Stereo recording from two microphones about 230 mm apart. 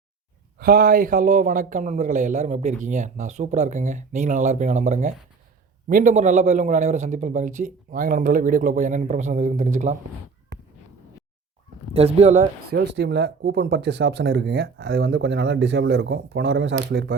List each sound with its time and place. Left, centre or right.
0.6 s a man's voice: right
11.9 s speech: right
12.7 s speech: right